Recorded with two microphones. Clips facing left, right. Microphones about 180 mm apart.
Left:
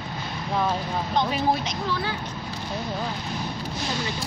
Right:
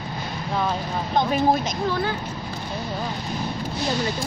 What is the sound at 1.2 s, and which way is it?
Speech, 50° right (ahead or behind).